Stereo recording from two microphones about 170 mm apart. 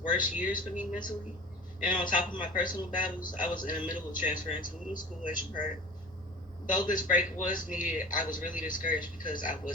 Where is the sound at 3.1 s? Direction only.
55° left (ahead or behind).